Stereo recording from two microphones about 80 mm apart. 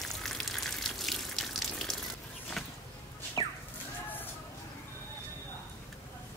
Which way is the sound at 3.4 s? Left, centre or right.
Left.